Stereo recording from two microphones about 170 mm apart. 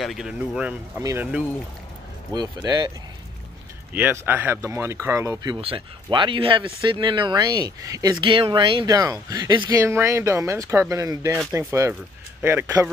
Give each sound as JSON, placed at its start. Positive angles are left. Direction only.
{"t": 0.0, "sound": "speech", "side_deg": 0}
{"t": 2.3, "sound": "speech", "side_deg": -25}
{"t": 3.9, "sound": "speech", "side_deg": -10}
{"t": 5.6, "sound": "speech", "side_deg": -30}